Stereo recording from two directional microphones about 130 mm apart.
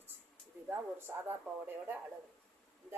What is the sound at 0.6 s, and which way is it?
Speech, 15° right (ahead or behind).